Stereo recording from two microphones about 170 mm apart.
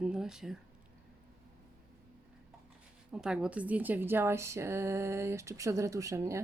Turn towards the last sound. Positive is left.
turn(degrees=-20)  # may be behind; listen again after turning